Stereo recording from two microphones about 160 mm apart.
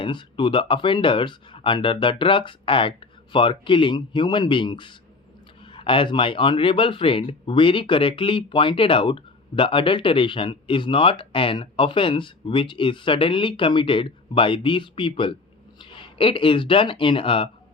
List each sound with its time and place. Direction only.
0.0 s speech: 30° left (ahead or behind)